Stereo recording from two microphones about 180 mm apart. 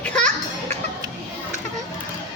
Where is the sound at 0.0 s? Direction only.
5° left (ahead or behind).